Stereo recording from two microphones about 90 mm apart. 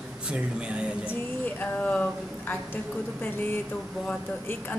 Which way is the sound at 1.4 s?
15° left (ahead or behind).